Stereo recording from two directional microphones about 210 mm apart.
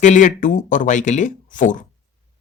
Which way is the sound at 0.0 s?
35° left (ahead or behind).